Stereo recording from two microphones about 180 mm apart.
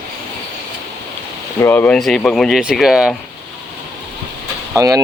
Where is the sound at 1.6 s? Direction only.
10° left (ahead or behind).